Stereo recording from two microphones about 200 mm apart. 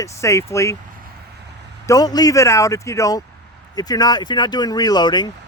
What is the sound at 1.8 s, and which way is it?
Speech, 20° left (ahead or behind).